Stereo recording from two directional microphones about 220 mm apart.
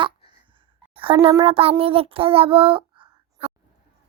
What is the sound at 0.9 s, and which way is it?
A woman's voice, 25° right (ahead or behind).